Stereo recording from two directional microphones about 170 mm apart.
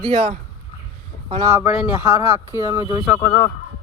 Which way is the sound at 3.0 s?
10° left (ahead or behind).